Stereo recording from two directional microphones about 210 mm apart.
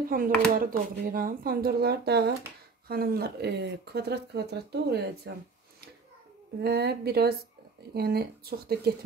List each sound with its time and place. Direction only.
0.1 s speech: 40° right (ahead or behind)
6.6 s speech: 50° right (ahead or behind)